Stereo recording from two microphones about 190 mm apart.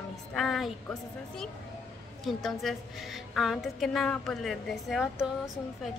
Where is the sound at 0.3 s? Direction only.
Centre (ahead or behind).